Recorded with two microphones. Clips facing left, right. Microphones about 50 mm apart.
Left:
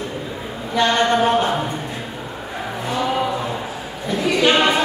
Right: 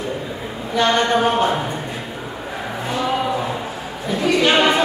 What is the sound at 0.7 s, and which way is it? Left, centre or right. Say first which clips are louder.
Speech: even; centre.